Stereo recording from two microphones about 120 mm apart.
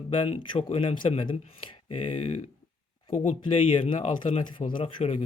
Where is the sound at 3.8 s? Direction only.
70° left (ahead or behind).